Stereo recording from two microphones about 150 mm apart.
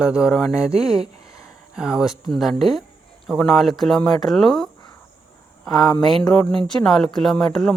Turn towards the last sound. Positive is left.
turn(degrees=0)  # may be behind; listen again after turning